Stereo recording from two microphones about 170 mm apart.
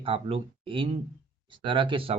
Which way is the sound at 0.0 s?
35° right (ahead or behind).